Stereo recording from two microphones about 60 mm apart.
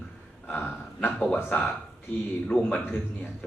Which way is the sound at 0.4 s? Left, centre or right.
Left.